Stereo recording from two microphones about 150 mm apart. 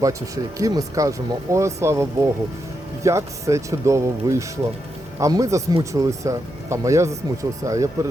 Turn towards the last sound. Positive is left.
turn(degrees=-20)  # may be behind; listen again after turning